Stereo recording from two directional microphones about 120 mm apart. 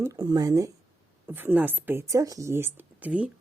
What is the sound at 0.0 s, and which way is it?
Speech, 30° right (ahead or behind).